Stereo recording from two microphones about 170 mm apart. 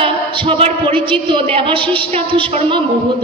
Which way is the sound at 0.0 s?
35° right (ahead or behind).